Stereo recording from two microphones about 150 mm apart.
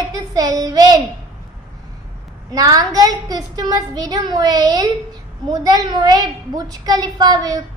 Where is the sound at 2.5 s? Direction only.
25° right (ahead or behind).